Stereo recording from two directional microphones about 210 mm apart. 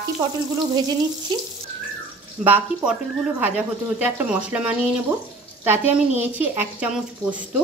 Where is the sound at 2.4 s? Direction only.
10° right (ahead or behind).